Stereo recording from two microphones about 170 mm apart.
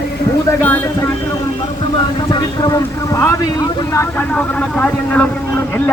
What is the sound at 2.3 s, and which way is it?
Speech, 20° left (ahead or behind).